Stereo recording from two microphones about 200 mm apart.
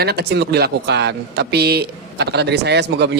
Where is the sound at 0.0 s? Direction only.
55° right (ahead or behind).